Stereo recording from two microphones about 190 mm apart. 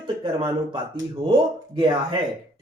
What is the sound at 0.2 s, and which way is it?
Speech, 25° right (ahead or behind).